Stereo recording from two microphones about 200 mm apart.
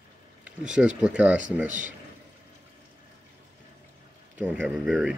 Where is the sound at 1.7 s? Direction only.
40° right (ahead or behind).